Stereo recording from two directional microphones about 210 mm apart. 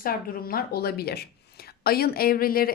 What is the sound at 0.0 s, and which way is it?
Speech, 45° left (ahead or behind).